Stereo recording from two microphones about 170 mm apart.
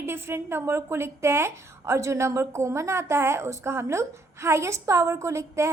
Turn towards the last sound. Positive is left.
turn(degrees=-15)  # may be behind; listen again after turning